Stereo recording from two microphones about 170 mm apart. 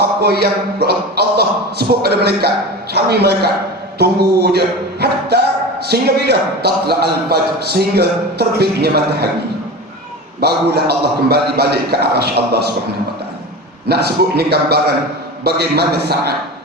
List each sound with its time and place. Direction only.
0.2 s a man's voice: 70° right (ahead or behind)
10.4 s a man's voice: 70° right (ahead or behind)
13.8 s a man's voice: 70° right (ahead or behind)